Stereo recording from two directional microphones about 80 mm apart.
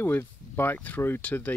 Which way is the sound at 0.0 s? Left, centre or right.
Left.